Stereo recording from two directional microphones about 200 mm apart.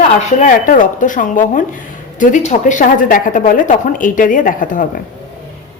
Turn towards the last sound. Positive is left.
turn(degrees=40)  # may be behind; listen again after turning